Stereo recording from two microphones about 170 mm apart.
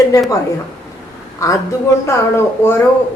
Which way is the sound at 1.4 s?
20° left (ahead or behind).